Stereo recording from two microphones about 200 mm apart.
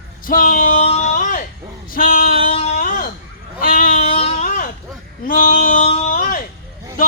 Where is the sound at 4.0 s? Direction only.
30° left (ahead or behind).